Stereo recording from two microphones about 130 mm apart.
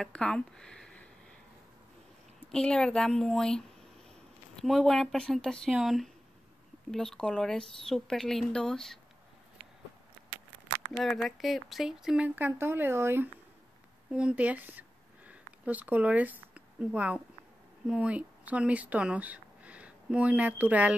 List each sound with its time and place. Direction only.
0.0 s speech: 5° left (ahead or behind)
2.5 s speech: 5° left (ahead or behind)
10.9 s speech: centre (ahead or behind)
12.4 s speech: 15° right (ahead or behind)